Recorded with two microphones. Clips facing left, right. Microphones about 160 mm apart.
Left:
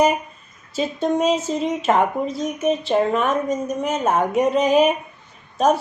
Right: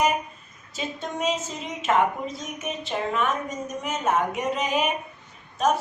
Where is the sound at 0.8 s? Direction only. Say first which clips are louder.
Left 10 dB; 35° left (ahead or behind).